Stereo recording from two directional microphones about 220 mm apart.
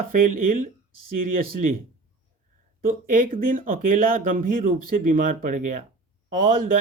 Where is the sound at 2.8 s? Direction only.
40° right (ahead or behind).